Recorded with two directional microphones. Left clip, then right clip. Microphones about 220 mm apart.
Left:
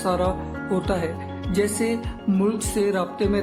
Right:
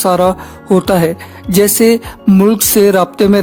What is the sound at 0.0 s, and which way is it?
Speech, 45° right (ahead or behind).